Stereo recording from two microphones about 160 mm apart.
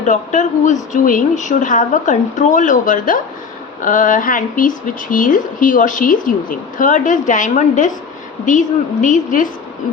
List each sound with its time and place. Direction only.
0.0 s a woman's voice: 50° left (ahead or behind)